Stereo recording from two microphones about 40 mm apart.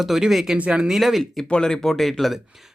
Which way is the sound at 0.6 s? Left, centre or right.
Right.